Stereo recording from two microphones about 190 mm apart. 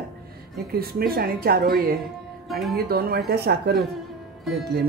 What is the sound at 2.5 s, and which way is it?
Speech, centre (ahead or behind).